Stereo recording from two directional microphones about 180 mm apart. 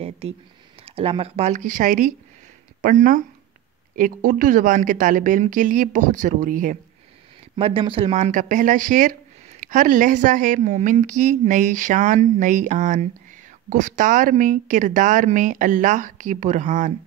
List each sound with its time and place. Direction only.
0.2 s speech: 35° right (ahead or behind)
7.5 s speech: 30° right (ahead or behind)